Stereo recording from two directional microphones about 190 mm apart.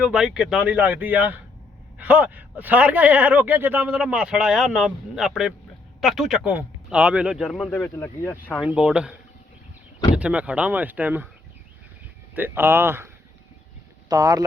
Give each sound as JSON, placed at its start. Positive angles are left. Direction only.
{"t": 0.0, "sound": "speech", "side_deg": -5}
{"t": 8.6, "sound": "speech", "side_deg": -5}
{"t": 10.2, "sound": "speech", "side_deg": -5}
{"t": 12.3, "sound": "speech", "side_deg": -10}
{"t": 14.1, "sound": "speech", "side_deg": -20}